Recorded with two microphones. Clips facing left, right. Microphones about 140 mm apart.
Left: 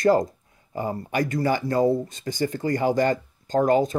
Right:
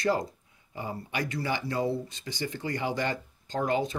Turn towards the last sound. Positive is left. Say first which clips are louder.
# left 8 dB
turn(degrees=45)  # may be behind; listen again after turning